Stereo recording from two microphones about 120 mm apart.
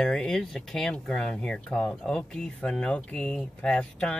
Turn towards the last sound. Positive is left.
turn(degrees=10)  # may be behind; listen again after turning